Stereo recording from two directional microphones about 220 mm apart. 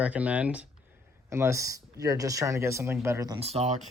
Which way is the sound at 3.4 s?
30° right (ahead or behind).